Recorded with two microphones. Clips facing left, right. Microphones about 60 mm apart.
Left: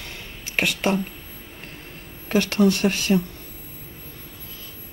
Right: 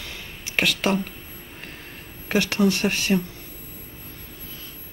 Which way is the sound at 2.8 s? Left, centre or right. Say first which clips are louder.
Left 2 dB; right.